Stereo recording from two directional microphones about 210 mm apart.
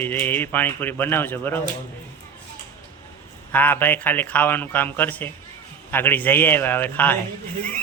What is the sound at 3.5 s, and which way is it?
A man's voice, 10° left (ahead or behind).